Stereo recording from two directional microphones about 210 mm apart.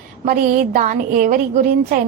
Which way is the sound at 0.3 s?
40° right (ahead or behind).